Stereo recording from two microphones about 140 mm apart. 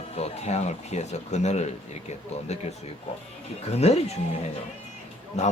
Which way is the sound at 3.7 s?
50° left (ahead or behind).